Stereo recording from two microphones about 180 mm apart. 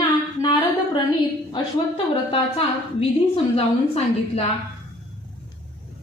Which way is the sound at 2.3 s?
30° left (ahead or behind).